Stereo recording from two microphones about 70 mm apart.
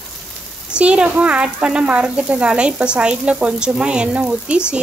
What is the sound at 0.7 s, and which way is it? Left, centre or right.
Speech, centre.